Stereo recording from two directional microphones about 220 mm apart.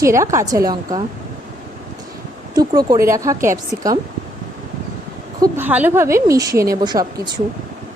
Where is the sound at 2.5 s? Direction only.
15° right (ahead or behind).